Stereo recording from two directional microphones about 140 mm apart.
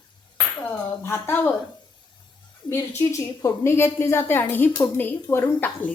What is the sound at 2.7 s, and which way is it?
A woman's voice, 20° left (ahead or behind).